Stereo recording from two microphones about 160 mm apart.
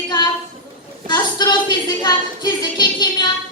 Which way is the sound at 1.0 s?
30° left (ahead or behind).